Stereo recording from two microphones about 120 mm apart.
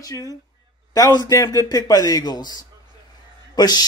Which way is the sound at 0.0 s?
30° left (ahead or behind).